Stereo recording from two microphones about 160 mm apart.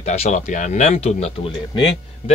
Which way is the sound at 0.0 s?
45° left (ahead or behind).